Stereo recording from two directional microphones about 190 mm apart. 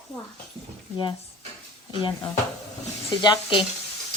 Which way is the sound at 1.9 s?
25° left (ahead or behind).